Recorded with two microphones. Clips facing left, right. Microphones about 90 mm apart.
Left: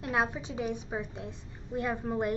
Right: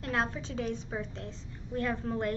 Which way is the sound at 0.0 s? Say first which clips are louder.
Left 2 dB; 15° left (ahead or behind).